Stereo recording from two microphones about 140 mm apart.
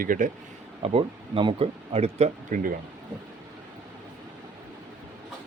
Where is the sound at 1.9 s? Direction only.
50° right (ahead or behind).